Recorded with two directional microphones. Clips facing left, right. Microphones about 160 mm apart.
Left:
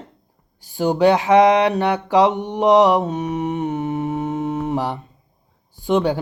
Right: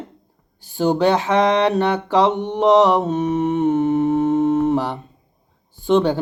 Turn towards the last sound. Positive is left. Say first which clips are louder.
# right 2 dB
turn(degrees=10)  # may be behind; listen again after turning